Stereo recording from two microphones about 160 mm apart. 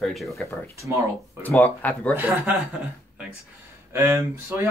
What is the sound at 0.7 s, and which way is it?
Speech, 20° right (ahead or behind).